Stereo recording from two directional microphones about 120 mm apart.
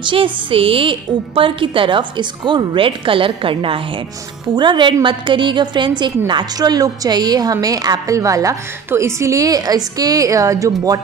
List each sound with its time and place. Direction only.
0.0 s a woman's voice: 45° right (ahead or behind); by 11.0 s 30° right (ahead or behind)